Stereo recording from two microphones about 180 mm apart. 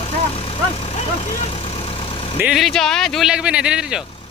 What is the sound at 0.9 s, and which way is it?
Vehicle, 40° left (ahead or behind).